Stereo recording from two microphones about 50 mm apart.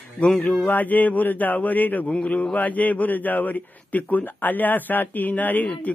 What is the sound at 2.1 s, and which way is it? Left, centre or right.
Speech, left.